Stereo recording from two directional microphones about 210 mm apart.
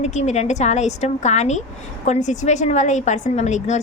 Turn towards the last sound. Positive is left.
turn(degrees=35)  # may be behind; listen again after turning